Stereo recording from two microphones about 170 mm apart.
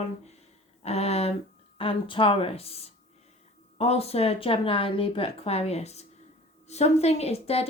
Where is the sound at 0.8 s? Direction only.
40° left (ahead or behind).